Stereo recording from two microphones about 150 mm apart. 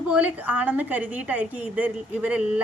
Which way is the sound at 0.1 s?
10° right (ahead or behind).